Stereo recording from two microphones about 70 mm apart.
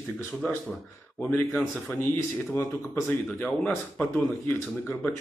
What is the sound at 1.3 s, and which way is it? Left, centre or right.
Speech, centre.